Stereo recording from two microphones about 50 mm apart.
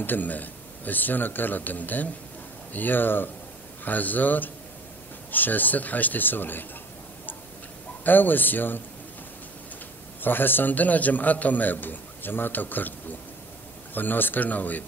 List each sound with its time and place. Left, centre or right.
0.0 s a man's voice: left
8.0 s a man's voice: left
10.2 s a man's voice: left
13.9 s a man's voice: left